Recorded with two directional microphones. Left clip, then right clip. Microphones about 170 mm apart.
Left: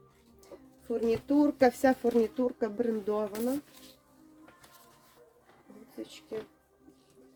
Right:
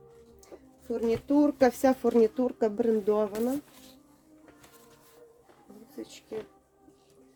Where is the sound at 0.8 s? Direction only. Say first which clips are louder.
Right 1 dB; 15° right (ahead or behind); by 3.3 s 30° right (ahead or behind).